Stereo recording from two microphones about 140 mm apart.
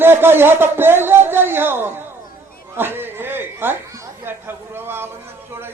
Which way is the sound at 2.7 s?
15° right (ahead or behind).